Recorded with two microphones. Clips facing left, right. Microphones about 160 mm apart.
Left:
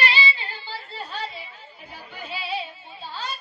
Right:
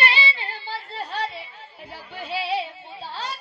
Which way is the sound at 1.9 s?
75° right (ahead or behind).